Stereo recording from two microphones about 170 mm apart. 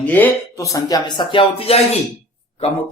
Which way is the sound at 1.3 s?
35° left (ahead or behind).